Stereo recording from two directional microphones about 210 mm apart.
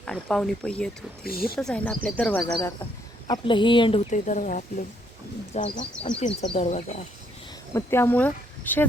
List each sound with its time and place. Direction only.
0.0 s speech: 5° left (ahead or behind)
1.2 s speech: 45° left (ahead or behind)
1.5 s speech: 5° left (ahead or behind)
3.2 s speech: 20° left (ahead or behind)
4.1 s speech: 35° left (ahead or behind)
7.7 s speech: 10° left (ahead or behind)